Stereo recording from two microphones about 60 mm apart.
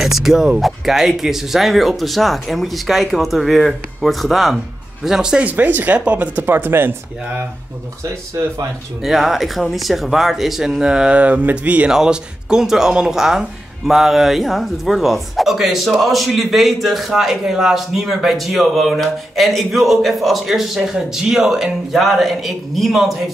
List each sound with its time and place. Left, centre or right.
0.0 s speech: centre
5.0 s speech: centre
5.4 s speech: right
6.4 s speech: right
9.0 s speech: centre; by 11.9 s right
11.9 s speech: centre